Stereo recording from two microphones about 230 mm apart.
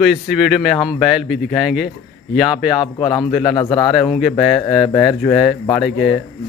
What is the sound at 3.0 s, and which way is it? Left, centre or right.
Speech, centre.